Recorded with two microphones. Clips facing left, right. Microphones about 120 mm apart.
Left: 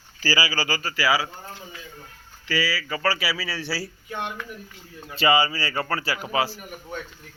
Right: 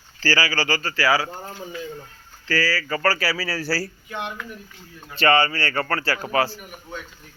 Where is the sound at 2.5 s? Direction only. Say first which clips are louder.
Right 3 dB; 5° left (ahead or behind).